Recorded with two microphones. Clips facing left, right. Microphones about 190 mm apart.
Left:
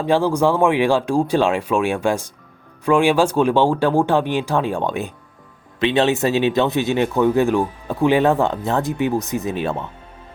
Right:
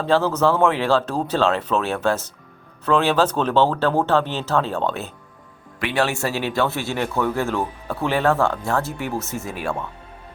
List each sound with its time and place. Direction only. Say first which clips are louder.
0.0 s speech: left 2 dB; 15° left (ahead or behind)